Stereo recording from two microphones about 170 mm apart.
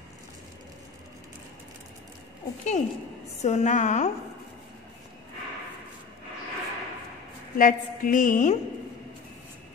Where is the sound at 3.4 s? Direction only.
45° left (ahead or behind).